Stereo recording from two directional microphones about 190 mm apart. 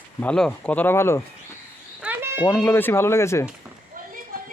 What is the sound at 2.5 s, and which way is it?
Speech, 10° left (ahead or behind).